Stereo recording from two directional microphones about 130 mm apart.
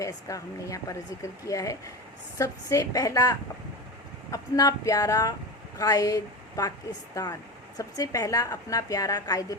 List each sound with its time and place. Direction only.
0.0 s speech: 25° left (ahead or behind)